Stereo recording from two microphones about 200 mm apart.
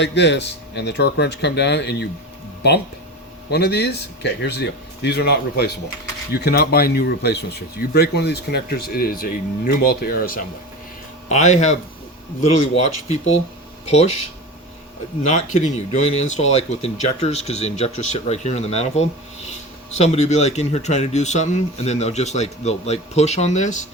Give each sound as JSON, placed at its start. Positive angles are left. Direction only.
{"t": 0.0, "sound": "speech", "side_deg": 60}
{"t": 3.5, "sound": "speech", "side_deg": 55}
{"t": 11.3, "sound": "speech", "side_deg": 35}
{"t": 15.2, "sound": "speech", "side_deg": 35}